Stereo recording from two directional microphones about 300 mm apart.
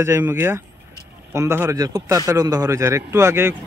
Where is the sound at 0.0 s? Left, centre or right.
Centre.